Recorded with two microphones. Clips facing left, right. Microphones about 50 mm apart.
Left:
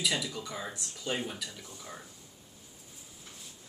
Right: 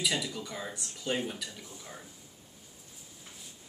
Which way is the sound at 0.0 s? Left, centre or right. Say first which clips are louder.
Even; centre.